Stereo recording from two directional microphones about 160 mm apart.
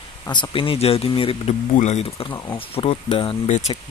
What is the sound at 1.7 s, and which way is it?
Speech, 45° left (ahead or behind).